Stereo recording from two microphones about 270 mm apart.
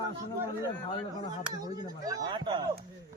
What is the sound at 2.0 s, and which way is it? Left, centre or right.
Speech, centre.